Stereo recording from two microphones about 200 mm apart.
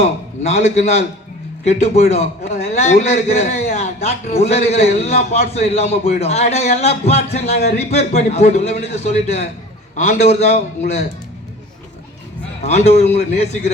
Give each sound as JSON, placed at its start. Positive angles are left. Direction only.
{"t": 0.4, "sound": "a man's voice", "side_deg": 35}
{"t": 12.6, "sound": "a man's voice", "side_deg": 30}